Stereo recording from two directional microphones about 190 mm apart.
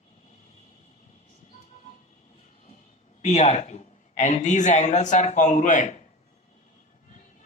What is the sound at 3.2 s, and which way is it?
Speech, 35° left (ahead or behind).